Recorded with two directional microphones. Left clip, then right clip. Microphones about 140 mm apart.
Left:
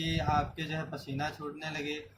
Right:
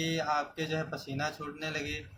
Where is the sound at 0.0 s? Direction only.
30° right (ahead or behind).